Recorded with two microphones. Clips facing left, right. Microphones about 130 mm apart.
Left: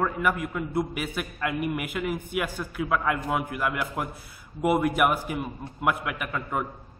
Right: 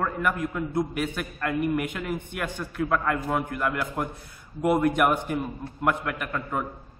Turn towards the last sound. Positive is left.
turn(degrees=5)  # may be behind; listen again after turning